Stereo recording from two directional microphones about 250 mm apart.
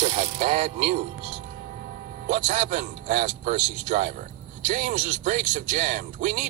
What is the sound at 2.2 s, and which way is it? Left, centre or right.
Speech, right.